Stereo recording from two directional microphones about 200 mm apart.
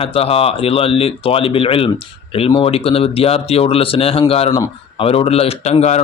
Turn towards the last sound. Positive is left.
turn(degrees=35)  # may be behind; listen again after turning